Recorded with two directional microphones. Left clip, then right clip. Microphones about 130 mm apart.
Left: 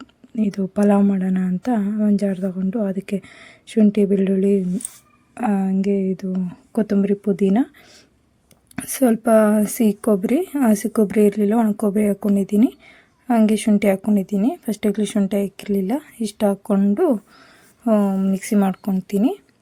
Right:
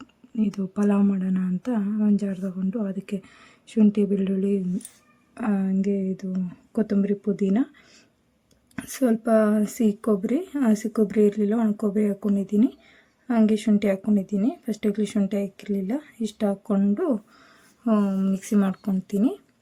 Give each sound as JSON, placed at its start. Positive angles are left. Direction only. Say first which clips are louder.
{"t": 0.0, "sound": "a woman's voice", "louder": "left 4 dB", "side_deg": 35}
{"t": 8.7, "sound": "a woman's voice", "louder": "left 5 dB", "side_deg": 40}